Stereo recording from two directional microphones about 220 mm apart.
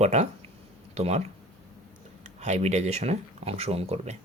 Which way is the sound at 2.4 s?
30° right (ahead or behind).